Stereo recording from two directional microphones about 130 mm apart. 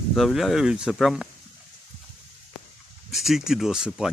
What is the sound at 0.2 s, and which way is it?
Speech, centre (ahead or behind).